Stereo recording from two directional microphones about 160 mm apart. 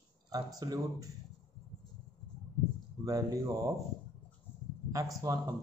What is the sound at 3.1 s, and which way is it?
Speech, 20° right (ahead or behind).